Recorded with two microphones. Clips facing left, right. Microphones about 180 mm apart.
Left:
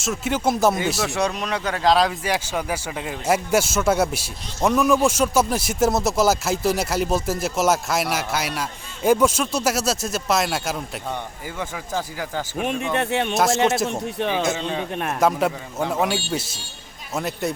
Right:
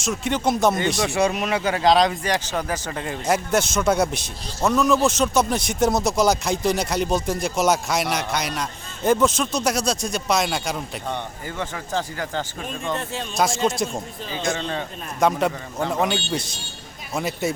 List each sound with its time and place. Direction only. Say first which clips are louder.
0.0 s speech: even; 5° left (ahead or behind)
13.0 s speech: left 4 dB; 65° left (ahead or behind)
14.4 s speech: left 1 dB; 5° left (ahead or behind)
14.9 s speech: left 8 dB; 70° left (ahead or behind)
15.2 s speech: right 1 dB; 5° left (ahead or behind)